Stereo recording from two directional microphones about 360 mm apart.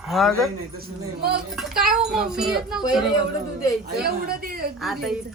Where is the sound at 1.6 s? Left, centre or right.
Centre.